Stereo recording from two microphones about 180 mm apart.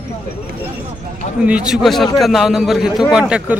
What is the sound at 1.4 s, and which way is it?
A man's voice, 5° right (ahead or behind).